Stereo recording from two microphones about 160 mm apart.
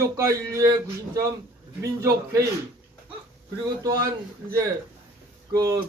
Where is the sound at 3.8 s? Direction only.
25° right (ahead or behind).